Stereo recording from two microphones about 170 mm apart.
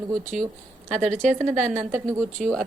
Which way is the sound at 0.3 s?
50° right (ahead or behind).